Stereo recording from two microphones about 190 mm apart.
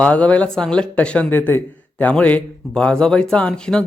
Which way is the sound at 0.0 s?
5° left (ahead or behind).